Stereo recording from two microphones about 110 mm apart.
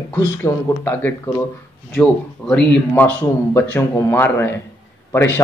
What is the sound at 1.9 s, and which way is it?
Speech, 10° left (ahead or behind).